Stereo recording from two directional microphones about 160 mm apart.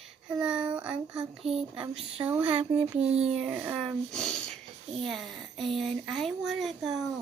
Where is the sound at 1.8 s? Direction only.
35° right (ahead or behind).